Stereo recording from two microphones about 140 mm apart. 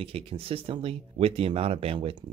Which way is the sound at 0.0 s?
40° right (ahead or behind).